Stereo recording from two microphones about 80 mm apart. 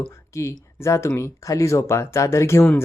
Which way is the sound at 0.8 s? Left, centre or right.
Left.